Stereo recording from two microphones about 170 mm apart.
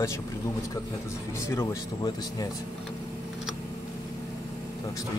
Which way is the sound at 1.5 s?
20° left (ahead or behind).